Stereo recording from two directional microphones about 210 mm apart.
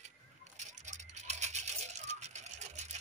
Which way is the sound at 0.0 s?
35° right (ahead or behind).